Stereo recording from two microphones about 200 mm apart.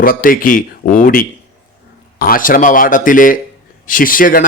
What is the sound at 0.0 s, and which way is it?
A man's voice, 45° left (ahead or behind).